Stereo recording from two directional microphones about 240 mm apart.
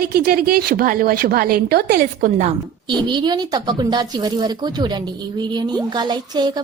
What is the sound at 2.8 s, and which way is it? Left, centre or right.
A woman's voice, centre.